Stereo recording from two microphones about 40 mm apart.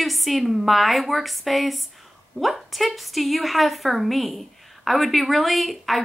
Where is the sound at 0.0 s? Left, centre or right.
Centre.